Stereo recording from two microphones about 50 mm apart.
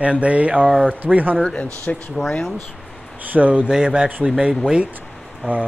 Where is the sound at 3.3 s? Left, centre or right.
Right.